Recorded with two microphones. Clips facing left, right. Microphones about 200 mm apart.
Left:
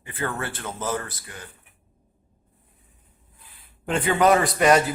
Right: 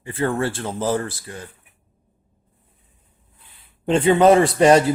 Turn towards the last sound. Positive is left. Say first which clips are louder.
# right 5 dB
turn(degrees=-30)  # may be behind; listen again after turning